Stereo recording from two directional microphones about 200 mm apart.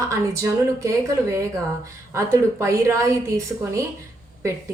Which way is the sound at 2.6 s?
15° right (ahead or behind).